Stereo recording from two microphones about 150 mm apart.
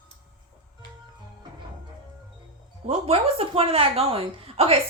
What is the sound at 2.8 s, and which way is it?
A woman's voice, 45° right (ahead or behind).